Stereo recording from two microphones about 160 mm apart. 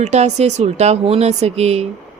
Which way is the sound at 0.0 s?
45° right (ahead or behind).